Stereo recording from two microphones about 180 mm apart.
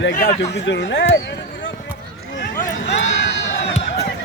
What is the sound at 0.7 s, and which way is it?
Speech, 80° left.